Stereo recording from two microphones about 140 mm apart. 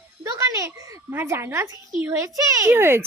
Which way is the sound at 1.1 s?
15° right (ahead or behind).